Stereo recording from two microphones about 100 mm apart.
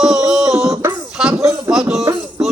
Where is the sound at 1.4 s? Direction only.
30° right (ahead or behind).